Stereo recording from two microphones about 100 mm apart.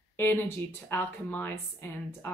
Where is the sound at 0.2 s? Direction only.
20° left (ahead or behind).